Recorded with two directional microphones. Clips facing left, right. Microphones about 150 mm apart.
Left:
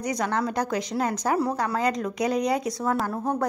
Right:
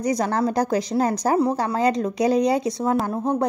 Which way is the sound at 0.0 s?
35° right (ahead or behind).